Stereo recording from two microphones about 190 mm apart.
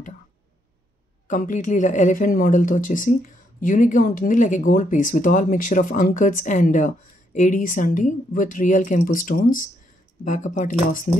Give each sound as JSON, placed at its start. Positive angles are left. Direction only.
{"t": 1.2, "sound": "speech", "side_deg": 40}